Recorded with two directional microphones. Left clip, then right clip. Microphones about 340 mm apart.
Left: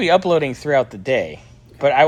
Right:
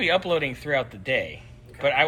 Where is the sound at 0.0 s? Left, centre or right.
Centre.